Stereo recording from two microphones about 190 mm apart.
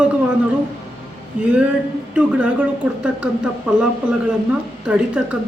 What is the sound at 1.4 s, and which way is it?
Speech, 5° right (ahead or behind).